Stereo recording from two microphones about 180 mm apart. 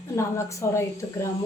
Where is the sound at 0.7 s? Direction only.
15° left (ahead or behind).